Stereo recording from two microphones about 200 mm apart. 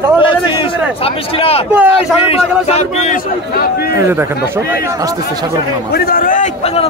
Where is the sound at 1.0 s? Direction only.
30° left (ahead or behind).